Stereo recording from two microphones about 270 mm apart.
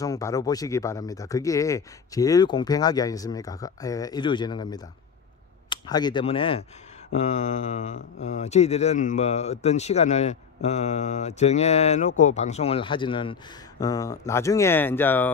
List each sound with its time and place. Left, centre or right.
0.0 s speech: centre